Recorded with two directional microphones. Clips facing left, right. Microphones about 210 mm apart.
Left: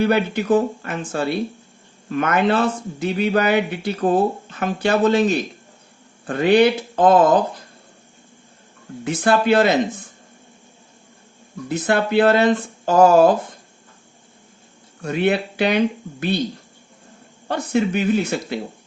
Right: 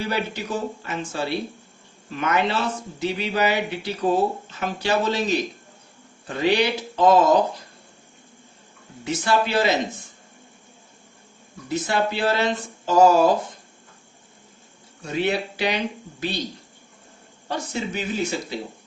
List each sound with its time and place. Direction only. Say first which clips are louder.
0.0 s a man's voice: left 8 dB; 55° left (ahead or behind)
9.0 s a man's voice: left 6 dB; 55° left (ahead or behind)
11.7 s a man's voice: left 5 dB; 55° left (ahead or behind)
15.0 s a man's voice: left 4 dB; 55° left (ahead or behind)
17.5 s speech: left 8 dB; 60° left (ahead or behind)